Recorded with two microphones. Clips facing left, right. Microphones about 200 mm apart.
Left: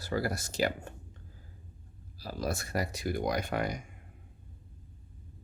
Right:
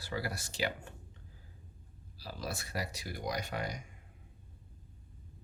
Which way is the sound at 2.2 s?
45° left (ahead or behind).